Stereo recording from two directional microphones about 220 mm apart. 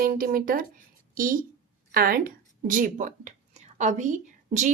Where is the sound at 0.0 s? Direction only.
40° right (ahead or behind).